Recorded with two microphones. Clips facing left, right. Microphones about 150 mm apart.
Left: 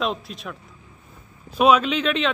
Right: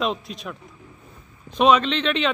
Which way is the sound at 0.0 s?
Centre (ahead or behind).